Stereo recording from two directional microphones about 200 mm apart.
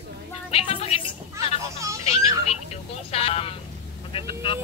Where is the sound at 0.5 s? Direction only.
30° left (ahead or behind).